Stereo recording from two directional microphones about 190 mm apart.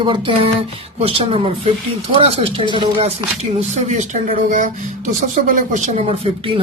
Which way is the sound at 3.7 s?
35° right (ahead or behind).